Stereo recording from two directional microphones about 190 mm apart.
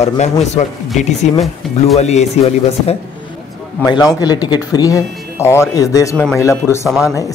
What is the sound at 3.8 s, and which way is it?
Speech, 20° left (ahead or behind).